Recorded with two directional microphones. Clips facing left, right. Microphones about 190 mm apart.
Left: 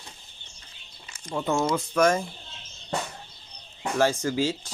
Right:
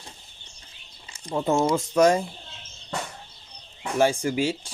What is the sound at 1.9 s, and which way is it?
Speech, 15° right (ahead or behind).